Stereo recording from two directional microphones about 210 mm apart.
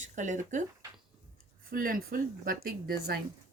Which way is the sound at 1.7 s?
45° right (ahead or behind).